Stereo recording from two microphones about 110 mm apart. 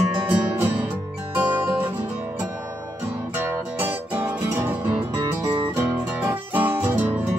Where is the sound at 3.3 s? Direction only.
15° right (ahead or behind).